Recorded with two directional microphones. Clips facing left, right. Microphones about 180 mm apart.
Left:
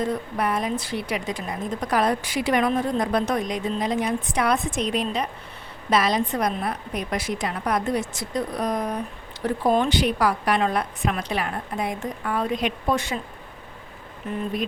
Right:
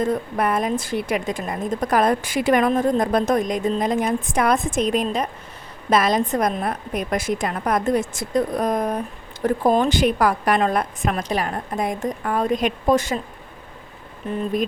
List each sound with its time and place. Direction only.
0.0 s a woman's voice: 50° right (ahead or behind)